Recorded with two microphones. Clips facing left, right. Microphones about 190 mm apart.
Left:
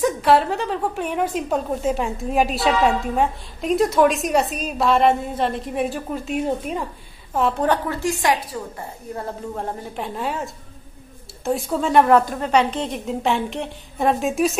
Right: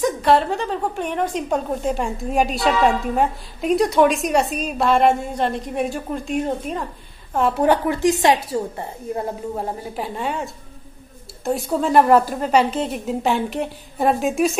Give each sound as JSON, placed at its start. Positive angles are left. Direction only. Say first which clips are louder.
{"t": 0.0, "sound": "a woman's voice", "louder": "even", "side_deg": 5}
{"t": 7.6, "sound": "a woman's voice", "louder": "right 4 dB", "side_deg": -15}
{"t": 9.6, "sound": "a woman's voice", "louder": "right 2 dB", "side_deg": -5}